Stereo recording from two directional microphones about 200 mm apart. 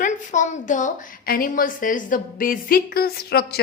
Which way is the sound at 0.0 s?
40° left (ahead or behind).